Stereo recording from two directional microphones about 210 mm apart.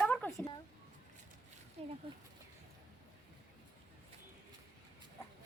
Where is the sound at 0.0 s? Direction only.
5° left (ahead or behind).